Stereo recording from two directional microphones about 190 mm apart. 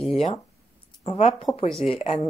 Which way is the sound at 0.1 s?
30° left (ahead or behind).